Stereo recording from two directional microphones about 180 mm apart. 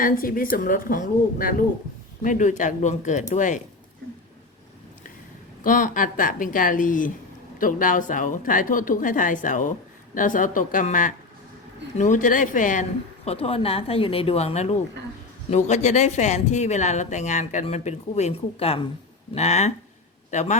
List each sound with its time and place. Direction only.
0.0 s a woman's voice: 50° left (ahead or behind)
5.6 s a woman's voice: 45° left (ahead or behind)
13.2 s speech: 35° left (ahead or behind)